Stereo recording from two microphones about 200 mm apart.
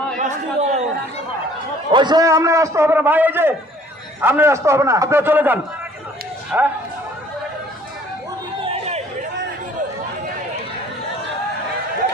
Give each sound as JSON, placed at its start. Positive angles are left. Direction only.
{"t": 0.2, "sound": "chatter", "side_deg": -35}
{"t": 1.9, "sound": "a man's voice", "side_deg": -20}
{"t": 8.7, "sound": "chatter", "side_deg": -30}